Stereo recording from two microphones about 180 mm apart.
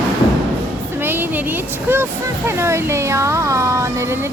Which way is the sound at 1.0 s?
10° right (ahead or behind).